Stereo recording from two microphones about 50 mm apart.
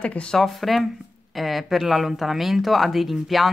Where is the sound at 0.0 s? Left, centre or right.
Left.